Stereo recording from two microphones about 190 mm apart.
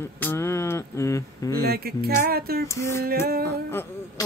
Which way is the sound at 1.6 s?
55° right (ahead or behind).